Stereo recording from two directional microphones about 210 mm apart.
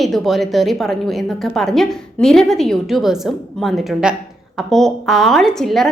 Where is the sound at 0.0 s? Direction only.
Centre (ahead or behind).